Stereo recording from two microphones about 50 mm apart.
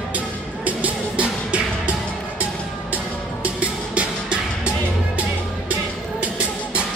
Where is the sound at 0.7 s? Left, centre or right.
Right.